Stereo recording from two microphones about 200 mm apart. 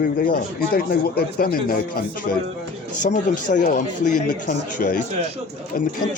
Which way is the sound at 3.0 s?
40° left (ahead or behind).